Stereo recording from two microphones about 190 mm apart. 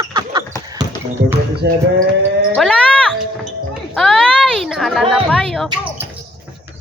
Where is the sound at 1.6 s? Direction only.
60° right (ahead or behind).